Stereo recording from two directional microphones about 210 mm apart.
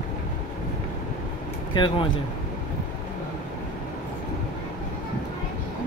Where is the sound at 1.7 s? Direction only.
20° left (ahead or behind).